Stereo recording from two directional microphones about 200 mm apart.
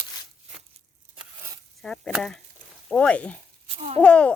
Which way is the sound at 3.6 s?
30° right (ahead or behind).